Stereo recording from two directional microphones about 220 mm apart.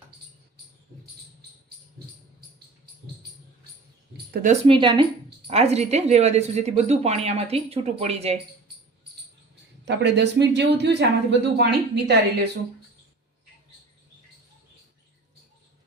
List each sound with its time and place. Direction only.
4.6 s speech: 20° right (ahead or behind)
9.8 s speech: 50° right (ahead or behind)